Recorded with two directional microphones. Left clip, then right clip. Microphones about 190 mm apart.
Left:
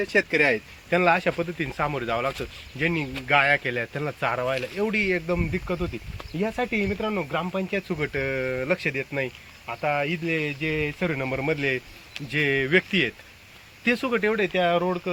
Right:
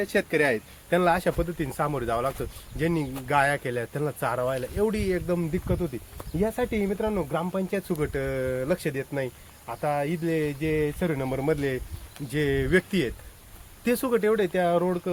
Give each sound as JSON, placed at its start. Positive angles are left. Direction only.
{"t": 0.0, "sound": "speech", "side_deg": 0}
{"t": 3.3, "sound": "speech", "side_deg": -25}
{"t": 3.9, "sound": "speech", "side_deg": -10}